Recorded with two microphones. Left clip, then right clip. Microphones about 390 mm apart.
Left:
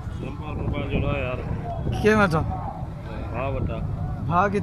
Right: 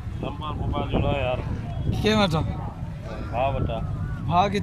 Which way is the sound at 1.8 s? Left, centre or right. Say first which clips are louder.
Left 3 dB; centre.